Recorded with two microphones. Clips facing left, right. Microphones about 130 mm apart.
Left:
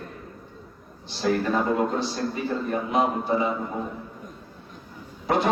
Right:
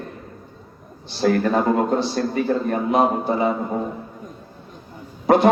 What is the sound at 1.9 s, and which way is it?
A man's voice, 65° right (ahead or behind).